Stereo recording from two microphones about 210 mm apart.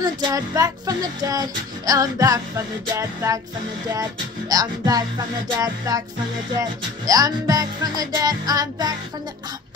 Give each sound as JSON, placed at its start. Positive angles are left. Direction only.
{"t": 0.0, "sound": "music", "side_deg": -15}
{"t": 4.5, "sound": "music", "side_deg": -15}
{"t": 7.1, "sound": "music", "side_deg": -15}